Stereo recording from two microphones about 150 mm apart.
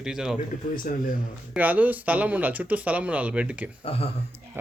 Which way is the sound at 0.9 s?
70° left (ahead or behind).